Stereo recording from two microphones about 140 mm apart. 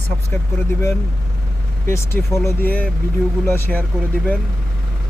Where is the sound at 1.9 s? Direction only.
20° left (ahead or behind).